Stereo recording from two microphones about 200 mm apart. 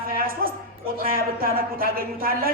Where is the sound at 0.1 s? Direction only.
45° right (ahead or behind).